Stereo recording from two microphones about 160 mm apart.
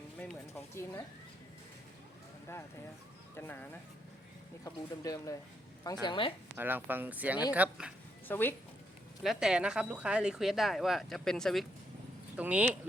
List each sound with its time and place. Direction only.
0.2 s a sound: 10° left (ahead or behind)
3.3 s speech: 10° left (ahead or behind); by 6.3 s 30° left (ahead or behind)
6.6 s speech: 10° right (ahead or behind)
8.3 s speech: 10° left (ahead or behind)
9.2 s speech: 5° right (ahead or behind)
12.4 s speech: 10° right (ahead or behind)